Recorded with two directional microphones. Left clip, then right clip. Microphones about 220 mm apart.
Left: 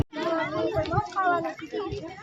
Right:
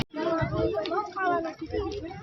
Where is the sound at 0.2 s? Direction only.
20° left (ahead or behind).